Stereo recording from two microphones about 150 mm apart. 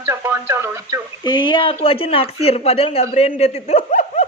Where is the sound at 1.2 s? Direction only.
30° left (ahead or behind); by 3.8 s 45° left (ahead or behind).